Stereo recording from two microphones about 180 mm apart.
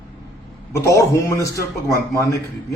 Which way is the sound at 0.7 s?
15° left (ahead or behind).